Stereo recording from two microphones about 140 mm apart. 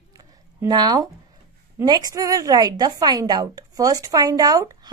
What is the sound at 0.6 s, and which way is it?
A woman's voice, 30° right (ahead or behind).